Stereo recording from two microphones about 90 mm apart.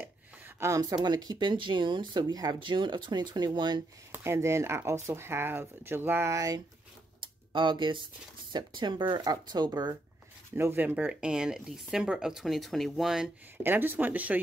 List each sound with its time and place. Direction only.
0.6 s speech: 40° right (ahead or behind)
2.6 s speech: 60° right (ahead or behind)
4.1 s speech: 30° right (ahead or behind)
7.2 s speech: 65° right (ahead or behind)
9.2 s speech: 50° right (ahead or behind)
10.5 s speech: 25° right (ahead or behind); by 13.3 s 5° right (ahead or behind)
13.6 s speech: 25° right (ahead or behind)